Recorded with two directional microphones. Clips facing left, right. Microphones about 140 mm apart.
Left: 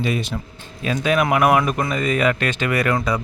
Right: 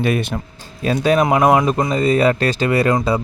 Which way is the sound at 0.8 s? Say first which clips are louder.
Right 4 dB; 35° right (ahead or behind).